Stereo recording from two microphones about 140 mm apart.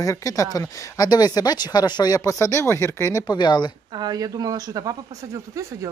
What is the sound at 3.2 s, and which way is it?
Speech, 30° left (ahead or behind).